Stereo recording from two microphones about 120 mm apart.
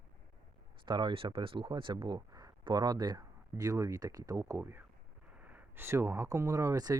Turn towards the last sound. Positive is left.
turn(degrees=-30)  # may be behind; listen again after turning